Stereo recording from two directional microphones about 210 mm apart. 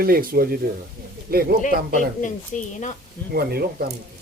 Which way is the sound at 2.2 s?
35° left (ahead or behind).